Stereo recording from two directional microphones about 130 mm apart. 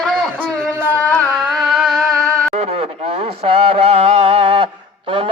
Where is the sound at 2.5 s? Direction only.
55° right (ahead or behind).